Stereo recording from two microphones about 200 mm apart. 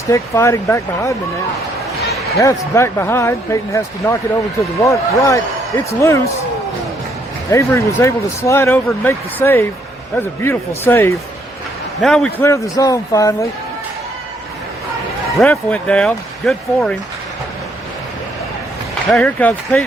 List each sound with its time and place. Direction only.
0.1 s speech: 15° left (ahead or behind)
2.4 s speech: 15° left (ahead or behind)
7.5 s speech: 15° left (ahead or behind)
15.4 s speech: 5° left (ahead or behind)
19.1 s speech: 5° left (ahead or behind)